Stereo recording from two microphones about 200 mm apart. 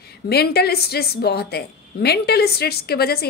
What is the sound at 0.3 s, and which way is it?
A woman's voice, 50° left (ahead or behind).